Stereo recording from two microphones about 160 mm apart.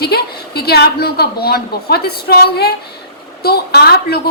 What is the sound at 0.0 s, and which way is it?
A woman's voice, 80° left.